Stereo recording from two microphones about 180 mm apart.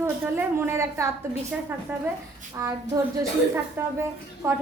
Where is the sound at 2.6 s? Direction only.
15° right (ahead or behind).